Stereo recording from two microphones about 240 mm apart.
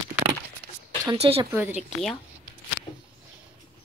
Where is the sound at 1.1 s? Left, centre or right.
Right.